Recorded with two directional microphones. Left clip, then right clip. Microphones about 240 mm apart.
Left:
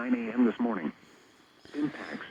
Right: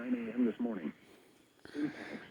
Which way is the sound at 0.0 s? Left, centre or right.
Left.